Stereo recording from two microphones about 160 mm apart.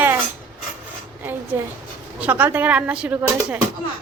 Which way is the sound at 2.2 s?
10° right (ahead or behind).